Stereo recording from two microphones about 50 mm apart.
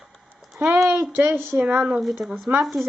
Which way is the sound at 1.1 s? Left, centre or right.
Right.